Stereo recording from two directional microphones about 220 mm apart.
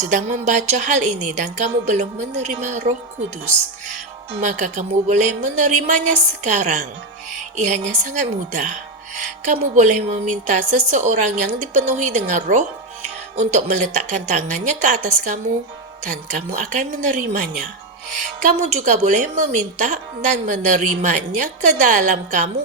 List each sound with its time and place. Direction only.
0.0 s a woman's voice: 35° right (ahead or behind)